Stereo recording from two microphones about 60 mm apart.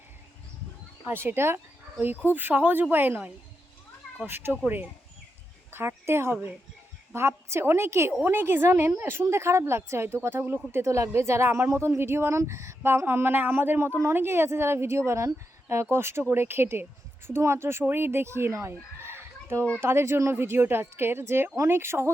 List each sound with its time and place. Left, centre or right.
1.0 s speech: right
5.7 s a woman's voice: right
8.2 s speech: right
9.3 s a woman's voice: right
10.8 s a woman's voice: right
12.4 s a woman's voice: right
19.0 s fowl: right
19.8 s a woman's voice: right
20.3 s a woman's voice: right